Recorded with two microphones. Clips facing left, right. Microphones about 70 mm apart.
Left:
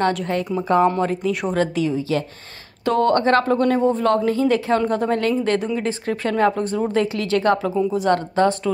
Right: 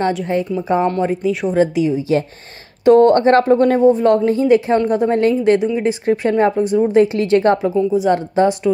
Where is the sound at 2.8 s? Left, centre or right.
Right.